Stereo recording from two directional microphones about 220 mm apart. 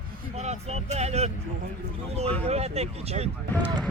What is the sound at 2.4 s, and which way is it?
Speech, 30° right (ahead or behind).